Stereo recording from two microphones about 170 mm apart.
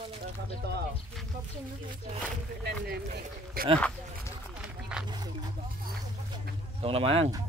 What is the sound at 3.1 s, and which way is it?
Speech, 60° right (ahead or behind).